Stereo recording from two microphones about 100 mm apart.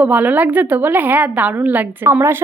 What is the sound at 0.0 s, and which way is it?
A woman's voice, 15° right (ahead or behind).